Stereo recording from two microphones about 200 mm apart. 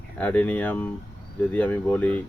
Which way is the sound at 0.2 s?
10° left (ahead or behind).